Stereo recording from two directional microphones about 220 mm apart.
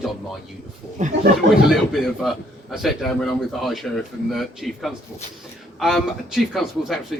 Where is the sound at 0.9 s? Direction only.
35° right (ahead or behind).